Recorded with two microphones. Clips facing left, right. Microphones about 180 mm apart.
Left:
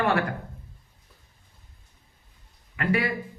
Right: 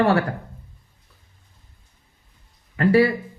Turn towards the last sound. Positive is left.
turn(degrees=-35)  # may be behind; listen again after turning